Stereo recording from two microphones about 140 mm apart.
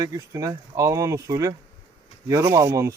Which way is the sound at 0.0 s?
25° right (ahead or behind).